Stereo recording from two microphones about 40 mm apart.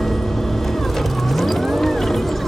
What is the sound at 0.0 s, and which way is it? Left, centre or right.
Vehicle, centre.